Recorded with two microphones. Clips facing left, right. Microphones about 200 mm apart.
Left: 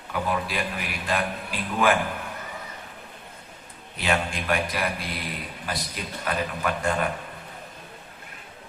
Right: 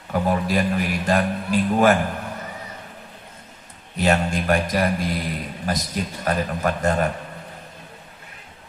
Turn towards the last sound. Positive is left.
turn(degrees=-45)  # may be behind; listen again after turning